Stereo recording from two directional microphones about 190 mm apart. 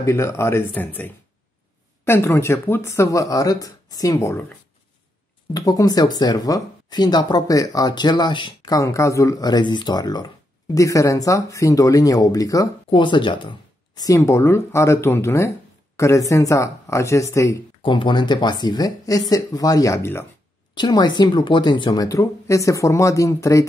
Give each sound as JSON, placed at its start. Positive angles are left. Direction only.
{"t": 0.0, "sound": "speech", "side_deg": 15}